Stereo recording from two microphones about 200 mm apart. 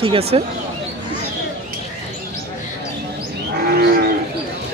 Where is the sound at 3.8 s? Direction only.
50° right (ahead or behind).